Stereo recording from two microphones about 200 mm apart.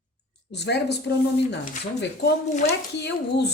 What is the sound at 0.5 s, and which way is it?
A woman's voice, 60° left (ahead or behind).